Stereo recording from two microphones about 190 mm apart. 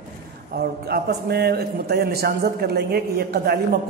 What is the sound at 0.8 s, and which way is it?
A man's voice, 55° right (ahead or behind).